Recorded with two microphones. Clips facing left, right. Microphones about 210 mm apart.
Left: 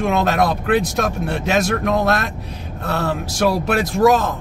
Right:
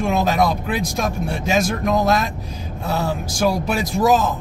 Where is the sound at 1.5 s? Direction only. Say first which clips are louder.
Left 1 dB; 60° left (ahead or behind).